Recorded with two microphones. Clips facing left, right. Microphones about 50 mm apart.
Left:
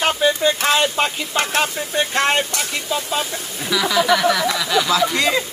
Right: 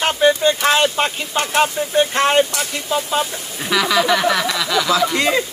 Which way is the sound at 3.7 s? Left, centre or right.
Right.